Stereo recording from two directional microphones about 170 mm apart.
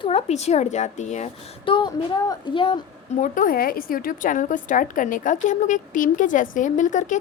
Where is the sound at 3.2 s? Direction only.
55° left (ahead or behind).